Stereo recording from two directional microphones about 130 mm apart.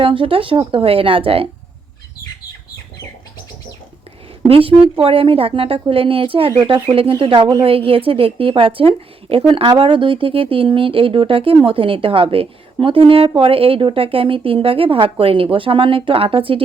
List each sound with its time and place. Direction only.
0.0 s speech: 45° right (ahead or behind)
4.4 s speech: 45° right (ahead or behind)
7.6 s speech: 45° right (ahead or behind)